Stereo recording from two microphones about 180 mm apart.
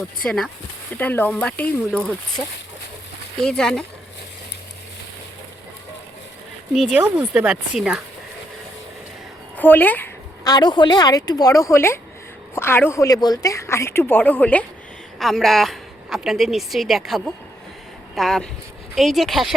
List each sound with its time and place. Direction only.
0.3 s a woman's voice: centre (ahead or behind)
3.3 s a woman's voice: 5° left (ahead or behind)
6.7 s a woman's voice: 5° right (ahead or behind)
9.6 s a woman's voice: 10° left (ahead or behind)
10.4 s a woman's voice: 25° left (ahead or behind); by 19.5 s centre (ahead or behind)